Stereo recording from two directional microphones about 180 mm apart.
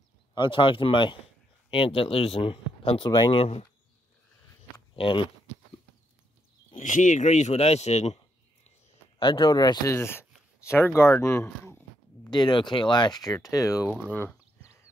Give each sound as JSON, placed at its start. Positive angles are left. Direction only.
{"t": 0.3, "sound": "speech", "side_deg": 25}
{"t": 4.7, "sound": "a sound", "side_deg": 25}
{"t": 6.7, "sound": "speech", "side_deg": 45}
{"t": 9.2, "sound": "speech", "side_deg": 25}
{"t": 12.3, "sound": "speech", "side_deg": 25}